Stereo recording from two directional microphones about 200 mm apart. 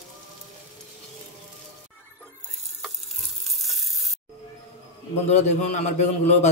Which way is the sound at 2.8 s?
Centre (ahead or behind).